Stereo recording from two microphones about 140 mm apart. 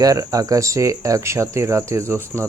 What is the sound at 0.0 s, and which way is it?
Speech, 25° right (ahead or behind).